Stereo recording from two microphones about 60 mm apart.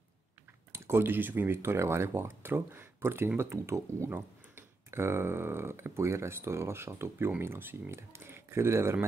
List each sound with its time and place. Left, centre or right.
0.7 s speech: right
4.1 s speech: right